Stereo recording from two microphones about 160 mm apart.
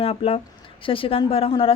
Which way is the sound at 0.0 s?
35° left (ahead or behind).